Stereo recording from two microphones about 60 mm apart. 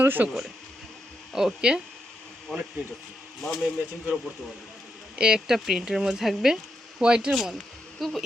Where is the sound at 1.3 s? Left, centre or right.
Centre.